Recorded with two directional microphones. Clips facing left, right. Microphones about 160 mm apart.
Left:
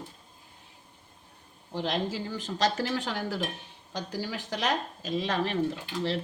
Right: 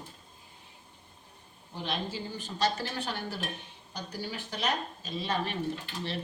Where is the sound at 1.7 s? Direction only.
90° left.